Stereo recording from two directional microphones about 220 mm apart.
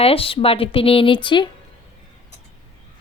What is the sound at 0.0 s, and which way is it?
A woman's voice, 25° left (ahead or behind).